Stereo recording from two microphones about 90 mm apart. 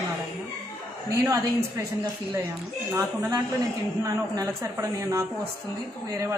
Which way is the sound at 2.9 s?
40° right (ahead or behind).